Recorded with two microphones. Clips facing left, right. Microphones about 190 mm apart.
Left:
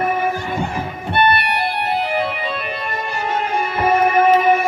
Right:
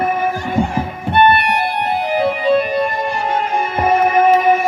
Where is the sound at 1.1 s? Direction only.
45° right (ahead or behind).